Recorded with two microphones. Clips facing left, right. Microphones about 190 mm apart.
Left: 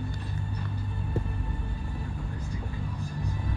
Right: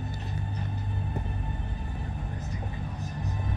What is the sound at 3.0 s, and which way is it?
Music, 20° right (ahead or behind).